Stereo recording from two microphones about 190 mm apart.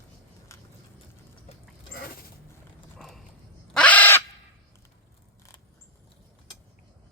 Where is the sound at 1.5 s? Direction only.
30° left (ahead or behind).